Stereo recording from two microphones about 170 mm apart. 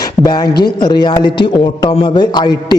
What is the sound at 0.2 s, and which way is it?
Speech, 25° left (ahead or behind).